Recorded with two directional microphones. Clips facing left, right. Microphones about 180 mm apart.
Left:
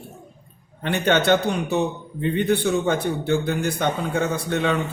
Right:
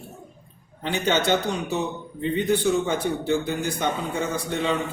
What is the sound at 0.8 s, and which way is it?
A man's voice, 60° left (ahead or behind).